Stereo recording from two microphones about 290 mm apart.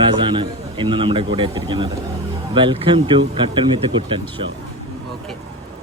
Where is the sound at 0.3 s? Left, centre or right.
Centre.